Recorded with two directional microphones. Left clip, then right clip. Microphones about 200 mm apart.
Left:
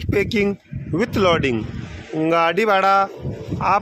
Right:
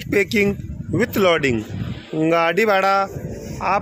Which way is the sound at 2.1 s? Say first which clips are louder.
Even; 5° right (ahead or behind).